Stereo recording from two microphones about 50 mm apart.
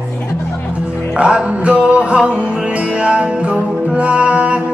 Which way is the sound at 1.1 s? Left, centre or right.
Centre.